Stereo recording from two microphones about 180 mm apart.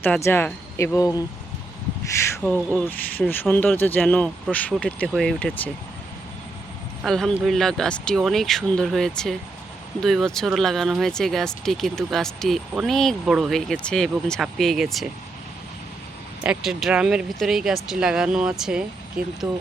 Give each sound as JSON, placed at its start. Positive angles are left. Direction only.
{"t": 0.3, "sound": "speech", "side_deg": 10}
{"t": 2.4, "sound": "speech", "side_deg": 5}
{"t": 7.0, "sound": "speech", "side_deg": 5}
{"t": 16.4, "sound": "speech", "side_deg": -5}